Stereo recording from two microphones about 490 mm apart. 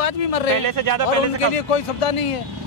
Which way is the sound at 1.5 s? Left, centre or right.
Left.